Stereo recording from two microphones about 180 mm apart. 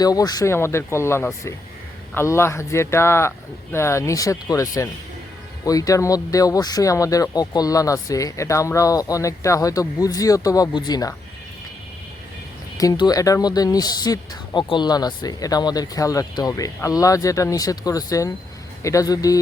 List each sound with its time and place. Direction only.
0.0 s speech: 20° left (ahead or behind)
12.7 s speech: 20° left (ahead or behind)